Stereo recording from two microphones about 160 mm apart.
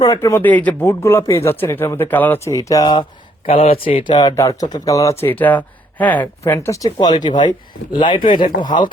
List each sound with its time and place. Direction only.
0.0 s speech: 20° left (ahead or behind)
3.5 s speech: 35° left (ahead or behind)